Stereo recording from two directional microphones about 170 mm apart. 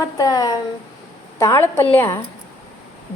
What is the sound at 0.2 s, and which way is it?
A woman's voice, 20° left (ahead or behind).